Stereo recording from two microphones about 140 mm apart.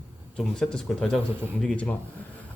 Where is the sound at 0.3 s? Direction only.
5° left (ahead or behind).